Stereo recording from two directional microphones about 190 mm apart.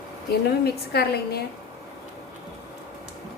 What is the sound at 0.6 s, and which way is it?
Speech, 55° left (ahead or behind).